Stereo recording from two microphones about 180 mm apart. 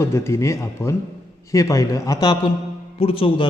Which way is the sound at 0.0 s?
15° left (ahead or behind).